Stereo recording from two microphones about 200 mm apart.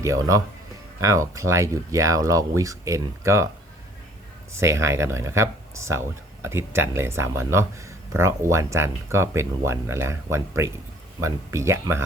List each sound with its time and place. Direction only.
0.0 s speech: 15° right (ahead or behind)
4.5 s speech: 15° right (ahead or behind)